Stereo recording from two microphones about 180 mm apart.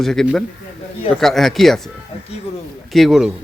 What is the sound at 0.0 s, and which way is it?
Speech, centre (ahead or behind).